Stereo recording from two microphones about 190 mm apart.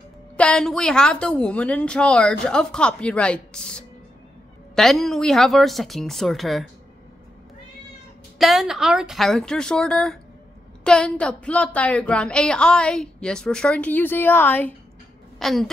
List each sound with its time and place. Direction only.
0.4 s a woman's voice: 5° left (ahead or behind)
8.4 s a woman's voice: centre (ahead or behind)